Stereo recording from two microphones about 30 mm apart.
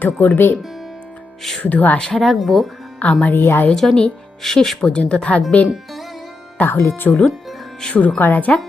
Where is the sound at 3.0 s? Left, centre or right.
Left.